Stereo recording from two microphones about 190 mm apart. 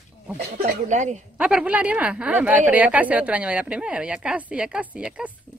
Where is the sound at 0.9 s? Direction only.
40° right (ahead or behind).